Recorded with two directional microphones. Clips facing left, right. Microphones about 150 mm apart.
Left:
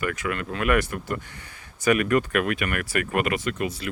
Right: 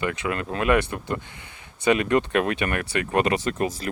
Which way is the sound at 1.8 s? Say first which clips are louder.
Right 1 dB; 25° right (ahead or behind).